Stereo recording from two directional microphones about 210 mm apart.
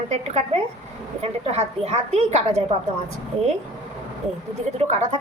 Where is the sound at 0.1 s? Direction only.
30° right (ahead or behind).